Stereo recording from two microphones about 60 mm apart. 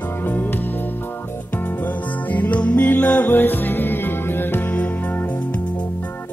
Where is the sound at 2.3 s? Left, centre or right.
Left.